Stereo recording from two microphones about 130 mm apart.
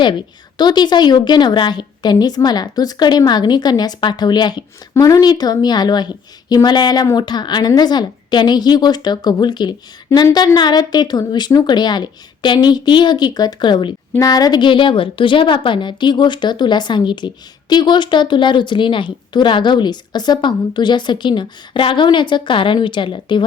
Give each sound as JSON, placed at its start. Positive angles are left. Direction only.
{"t": 0.6, "sound": "speech", "side_deg": 35}